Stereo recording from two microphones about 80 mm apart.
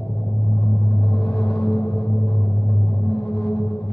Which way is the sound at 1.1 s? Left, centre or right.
Centre.